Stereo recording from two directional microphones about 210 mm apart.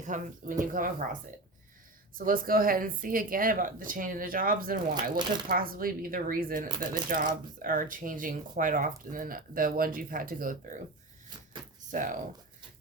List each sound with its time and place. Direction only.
0.0 s speech: 35° right (ahead or behind)
2.1 s speech: 40° right (ahead or behind)
5.1 s speech: 20° right (ahead or behind)
5.5 s speech: 45° right (ahead or behind)
11.9 s speech: 40° right (ahead or behind)